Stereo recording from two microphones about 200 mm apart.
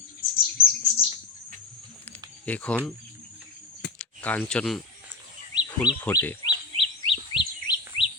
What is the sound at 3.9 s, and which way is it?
Speech, 5° left (ahead or behind).